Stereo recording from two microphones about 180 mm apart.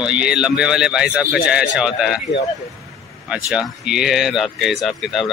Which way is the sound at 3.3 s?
5° right (ahead or behind).